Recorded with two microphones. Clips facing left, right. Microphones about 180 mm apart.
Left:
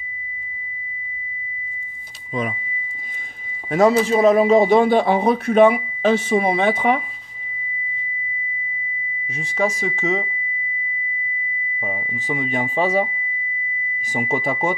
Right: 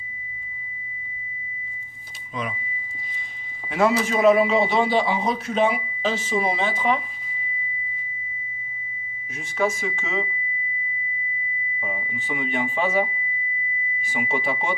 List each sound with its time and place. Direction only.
4.0 s speech: 35° left (ahead or behind); by 7.0 s 60° left (ahead or behind)
9.3 s speech: 35° left (ahead or behind)
11.8 s speech: 35° left (ahead or behind)
14.1 s speech: 45° left (ahead or behind)